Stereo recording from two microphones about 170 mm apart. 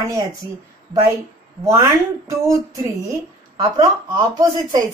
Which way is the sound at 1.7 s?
20° right (ahead or behind).